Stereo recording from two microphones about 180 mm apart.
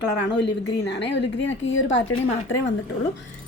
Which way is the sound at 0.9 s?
75° left (ahead or behind).